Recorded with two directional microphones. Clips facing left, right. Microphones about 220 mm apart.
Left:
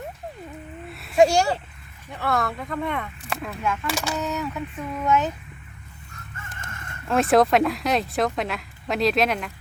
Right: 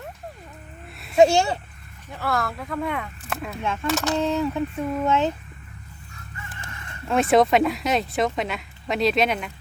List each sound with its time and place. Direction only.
1.1 s a child's voice: 25° right (ahead or behind)
2.1 s speech: centre (ahead or behind)
3.6 s speech: 25° right (ahead or behind)
3.8 s speech: 10° left (ahead or behind)
4.2 s speech: 30° right (ahead or behind)
6.3 s chicken: 45° left (ahead or behind)
7.1 s speech: centre (ahead or behind)